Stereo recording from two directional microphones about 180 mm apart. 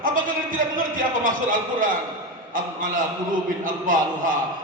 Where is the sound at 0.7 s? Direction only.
50° right (ahead or behind).